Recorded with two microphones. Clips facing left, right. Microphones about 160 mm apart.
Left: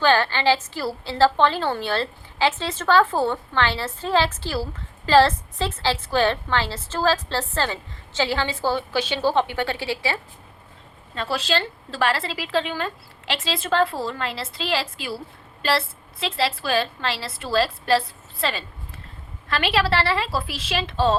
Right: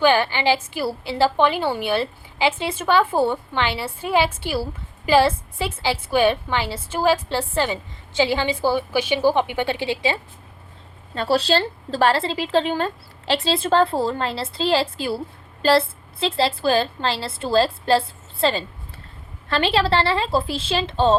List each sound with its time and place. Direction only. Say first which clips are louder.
0.0 s a woman's voice: right 1 dB; 15° right (ahead or behind)
11.1 s a woman's voice: right 5 dB; 35° right (ahead or behind)
16.2 s a woman's voice: right 5 dB; 30° right (ahead or behind)